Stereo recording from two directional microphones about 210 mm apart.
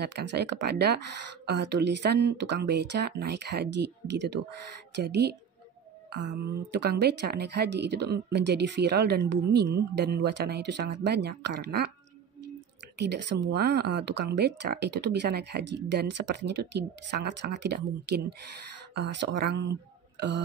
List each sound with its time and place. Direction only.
0.0 s speech: 55° right (ahead or behind)
12.9 s speech: 55° right (ahead or behind)